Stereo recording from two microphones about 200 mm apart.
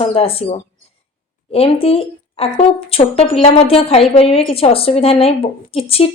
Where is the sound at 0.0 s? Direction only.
30° left (ahead or behind).